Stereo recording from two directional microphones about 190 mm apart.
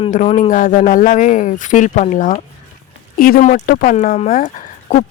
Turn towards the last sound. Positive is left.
turn(degrees=45)  # may be behind; listen again after turning